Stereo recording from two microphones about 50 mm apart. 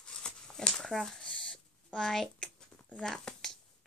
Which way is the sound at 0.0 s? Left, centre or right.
Centre.